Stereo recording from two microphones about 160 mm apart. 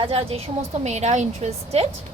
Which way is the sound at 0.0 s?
35° right (ahead or behind).